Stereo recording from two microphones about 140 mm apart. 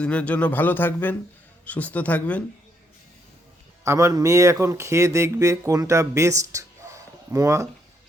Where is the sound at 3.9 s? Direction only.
20° right (ahead or behind).